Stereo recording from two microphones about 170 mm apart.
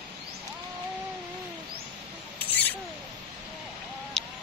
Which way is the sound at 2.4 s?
10° left (ahead or behind).